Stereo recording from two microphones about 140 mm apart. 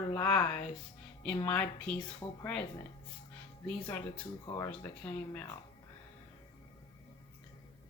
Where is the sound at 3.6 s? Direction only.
10° left (ahead or behind).